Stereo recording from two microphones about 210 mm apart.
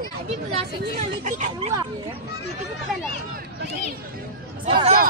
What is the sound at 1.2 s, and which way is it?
Speech, 35° right (ahead or behind).